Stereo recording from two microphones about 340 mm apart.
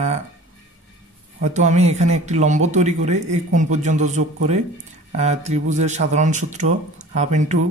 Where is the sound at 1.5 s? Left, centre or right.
Right.